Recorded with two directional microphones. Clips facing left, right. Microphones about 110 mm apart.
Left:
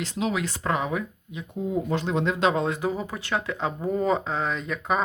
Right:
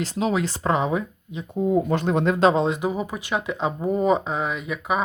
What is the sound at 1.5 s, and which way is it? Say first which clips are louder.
Speech: right 6 dB; 50° right (ahead or behind).